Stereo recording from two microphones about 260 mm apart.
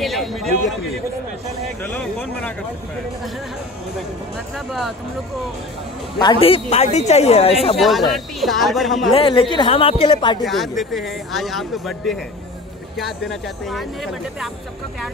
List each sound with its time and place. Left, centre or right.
0.0 s a sound: centre
1.8 s speech: centre
4.6 s speech: centre
6.1 s a woman's voice: centre
7.7 s speech: centre
9.1 s a woman's voice: centre
10.4 s speech: centre